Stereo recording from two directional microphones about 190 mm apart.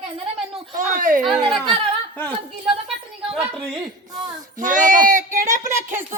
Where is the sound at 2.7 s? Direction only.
5° right (ahead or behind).